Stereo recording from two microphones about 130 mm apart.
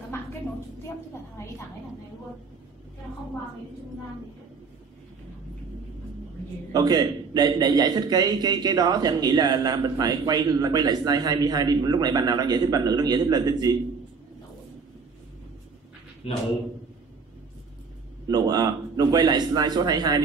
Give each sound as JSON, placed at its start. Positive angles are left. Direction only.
{"t": 6.7, "sound": "a man's voice", "side_deg": -30}
{"t": 18.2, "sound": "a man's voice", "side_deg": -30}